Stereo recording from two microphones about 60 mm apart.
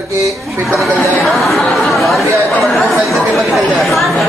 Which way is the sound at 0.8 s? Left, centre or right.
Centre.